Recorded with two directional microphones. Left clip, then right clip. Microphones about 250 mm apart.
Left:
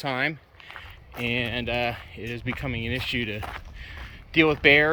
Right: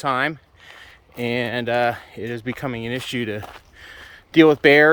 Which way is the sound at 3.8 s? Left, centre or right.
Right.